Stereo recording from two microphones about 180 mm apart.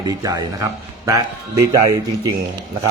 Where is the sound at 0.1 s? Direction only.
20° right (ahead or behind).